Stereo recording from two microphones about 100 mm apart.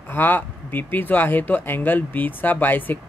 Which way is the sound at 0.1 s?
20° left (ahead or behind).